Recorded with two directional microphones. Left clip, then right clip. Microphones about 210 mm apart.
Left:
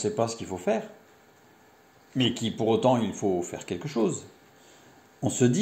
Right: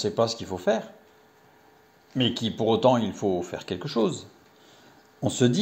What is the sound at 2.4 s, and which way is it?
Speech, 35° right (ahead or behind).